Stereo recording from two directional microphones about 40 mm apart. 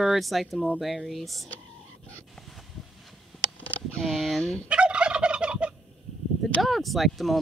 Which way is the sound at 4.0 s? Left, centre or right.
Centre.